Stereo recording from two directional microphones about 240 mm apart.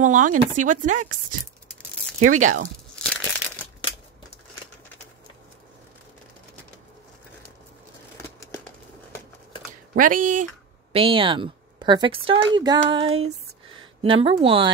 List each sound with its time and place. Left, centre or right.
0.0 s speech: right
2.3 s speech: right
3.0 s crumpling: centre
9.9 s speech: right
10.9 s a woman's voice: right